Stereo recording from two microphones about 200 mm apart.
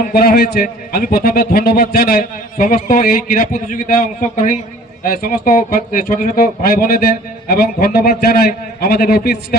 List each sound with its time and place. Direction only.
0.0 s a man's voice: 50° left (ahead or behind)